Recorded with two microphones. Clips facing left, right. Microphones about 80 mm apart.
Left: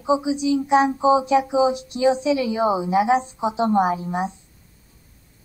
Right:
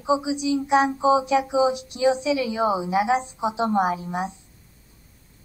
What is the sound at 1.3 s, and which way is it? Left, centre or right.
A woman's voice, left.